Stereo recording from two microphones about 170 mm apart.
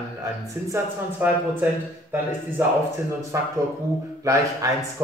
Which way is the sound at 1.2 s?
10° right (ahead or behind).